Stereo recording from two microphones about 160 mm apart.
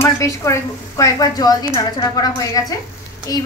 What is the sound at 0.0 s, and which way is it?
Speech, 20° left (ahead or behind).